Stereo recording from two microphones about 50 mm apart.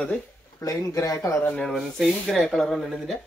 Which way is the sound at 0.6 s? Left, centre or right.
Left.